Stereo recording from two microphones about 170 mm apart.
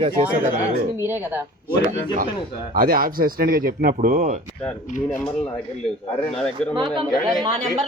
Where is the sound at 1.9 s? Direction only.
50° right (ahead or behind).